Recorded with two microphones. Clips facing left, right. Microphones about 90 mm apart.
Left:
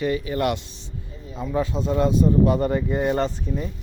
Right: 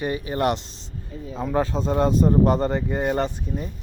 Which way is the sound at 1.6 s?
40° right (ahead or behind).